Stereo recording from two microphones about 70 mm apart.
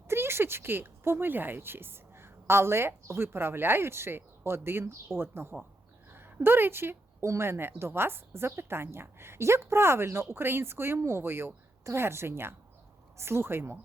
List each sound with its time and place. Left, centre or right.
0.1 s speech: right
6.1 s a sound: right
7.3 s speech: right